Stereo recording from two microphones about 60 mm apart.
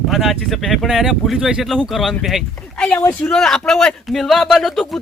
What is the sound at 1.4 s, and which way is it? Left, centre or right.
Speech, centre.